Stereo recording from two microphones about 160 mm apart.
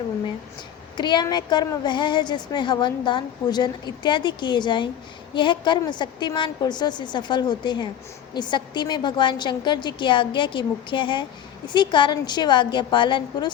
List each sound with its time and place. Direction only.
0.9 s a woman's voice: 30° left (ahead or behind)